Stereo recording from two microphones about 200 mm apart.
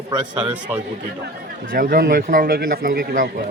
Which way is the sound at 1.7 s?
45° right (ahead or behind).